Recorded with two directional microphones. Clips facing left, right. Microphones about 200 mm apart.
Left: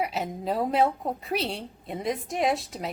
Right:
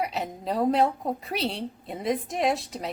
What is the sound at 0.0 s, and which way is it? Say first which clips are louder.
A woman's voice: left 1 dB; centre (ahead or behind).